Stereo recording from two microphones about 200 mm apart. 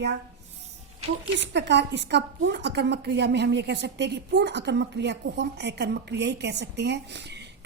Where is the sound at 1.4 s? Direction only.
60° right (ahead or behind).